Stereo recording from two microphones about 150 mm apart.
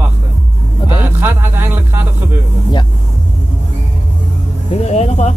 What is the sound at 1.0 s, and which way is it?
A man's voice, 15° right (ahead or behind).